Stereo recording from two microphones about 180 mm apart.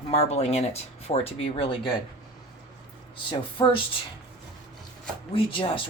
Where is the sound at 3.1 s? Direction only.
30° left (ahead or behind).